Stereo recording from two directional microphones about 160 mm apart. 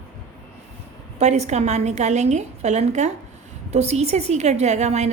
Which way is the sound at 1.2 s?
45° right (ahead or behind).